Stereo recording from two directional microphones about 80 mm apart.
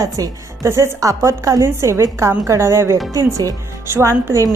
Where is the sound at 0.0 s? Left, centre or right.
Right.